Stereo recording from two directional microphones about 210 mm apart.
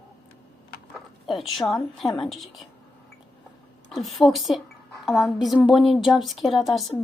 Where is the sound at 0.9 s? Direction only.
Centre (ahead or behind).